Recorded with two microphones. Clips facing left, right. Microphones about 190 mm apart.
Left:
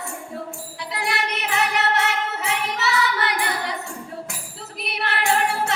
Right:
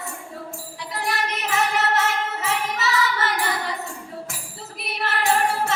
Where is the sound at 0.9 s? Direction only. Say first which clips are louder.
Even; 70° left (ahead or behind).